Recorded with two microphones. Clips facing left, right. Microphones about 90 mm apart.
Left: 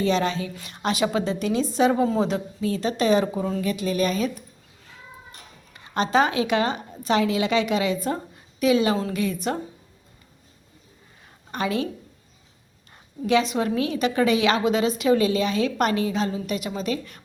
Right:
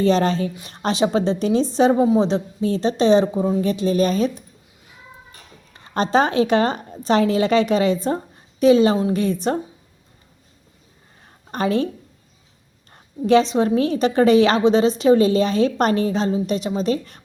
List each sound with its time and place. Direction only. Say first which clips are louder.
0.0 s a woman's voice: right 5 dB; 40° right (ahead or behind)
2.0 s a woman's voice: right 5 dB; 20° right (ahead or behind); by 4.4 s 35° right (ahead or behind)
5.7 s a woman's voice: right 3 dB; 40° right (ahead or behind)
11.5 s a woman's voice: right 5 dB; 40° right (ahead or behind)
12.9 s a woman's voice: right 6 dB; 35° right (ahead or behind)